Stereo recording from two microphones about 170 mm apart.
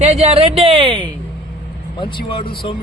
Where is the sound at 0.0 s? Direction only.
35° right (ahead or behind).